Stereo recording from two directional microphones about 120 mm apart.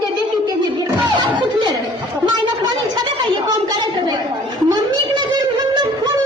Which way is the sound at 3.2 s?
35° right (ahead or behind).